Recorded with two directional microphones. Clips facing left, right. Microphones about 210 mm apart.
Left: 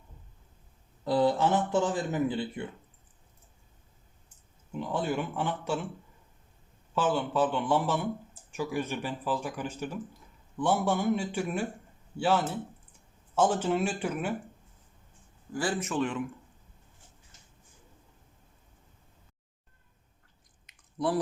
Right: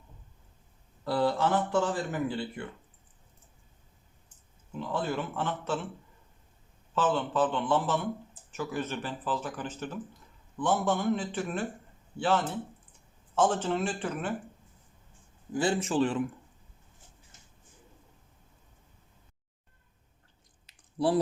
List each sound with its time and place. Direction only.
1.0 s speech: 20° left (ahead or behind)
4.7 s speech: 15° left (ahead or behind)
6.9 s speech: 10° left (ahead or behind)
15.5 s a man's voice: 25° right (ahead or behind)
20.7 s a sound: 30° right (ahead or behind)